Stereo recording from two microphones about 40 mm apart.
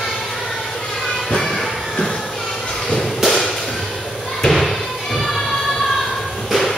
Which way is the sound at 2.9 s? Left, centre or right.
Centre.